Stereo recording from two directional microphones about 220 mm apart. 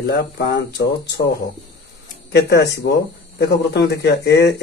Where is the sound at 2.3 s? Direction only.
50° left (ahead or behind).